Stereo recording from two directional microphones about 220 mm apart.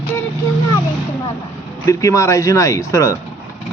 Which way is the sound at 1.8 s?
15° left (ahead or behind).